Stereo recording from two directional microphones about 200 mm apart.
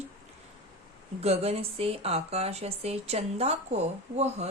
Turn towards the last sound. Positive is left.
turn(degrees=-30)  # may be behind; listen again after turning